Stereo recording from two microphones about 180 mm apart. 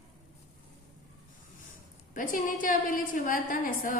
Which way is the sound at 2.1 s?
50° left (ahead or behind).